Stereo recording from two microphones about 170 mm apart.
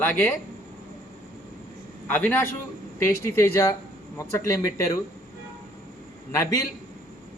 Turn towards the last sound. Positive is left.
turn(degrees=20)  # may be behind; listen again after turning